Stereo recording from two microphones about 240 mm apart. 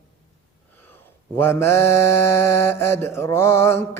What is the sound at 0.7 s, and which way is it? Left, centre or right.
Mantra, centre.